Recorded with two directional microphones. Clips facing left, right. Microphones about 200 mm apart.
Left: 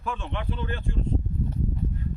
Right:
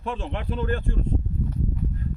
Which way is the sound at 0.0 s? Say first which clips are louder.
Right 2 dB; 35° right (ahead or behind).